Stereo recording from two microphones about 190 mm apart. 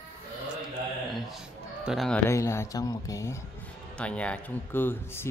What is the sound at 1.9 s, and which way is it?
Speech, centre (ahead or behind).